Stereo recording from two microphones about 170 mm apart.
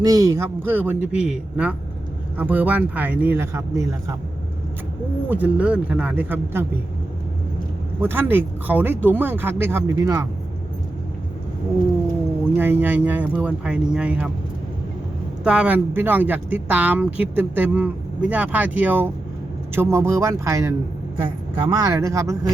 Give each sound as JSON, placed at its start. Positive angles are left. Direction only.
{"t": 0.0, "sound": "speech", "side_deg": -20}
{"t": 5.3, "sound": "speech", "side_deg": -10}
{"t": 8.0, "sound": "speech", "side_deg": -10}
{"t": 12.5, "sound": "speech", "side_deg": -10}
{"t": 15.4, "sound": "speech", "side_deg": -5}